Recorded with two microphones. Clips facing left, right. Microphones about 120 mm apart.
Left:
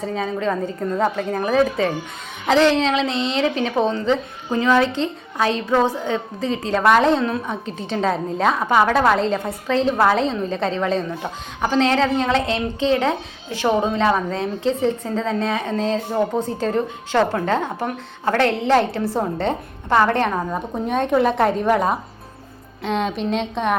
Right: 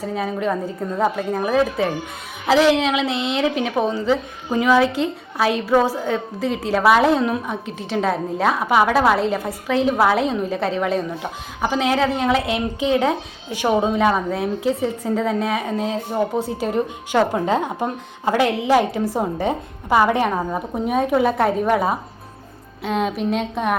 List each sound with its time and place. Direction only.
0.0 s a woman's voice: 5° right (ahead or behind)